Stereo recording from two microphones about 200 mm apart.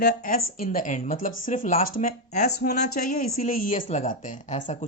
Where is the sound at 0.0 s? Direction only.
50° left (ahead or behind).